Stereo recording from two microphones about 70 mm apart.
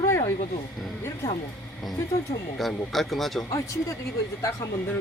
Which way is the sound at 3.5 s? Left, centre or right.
Left.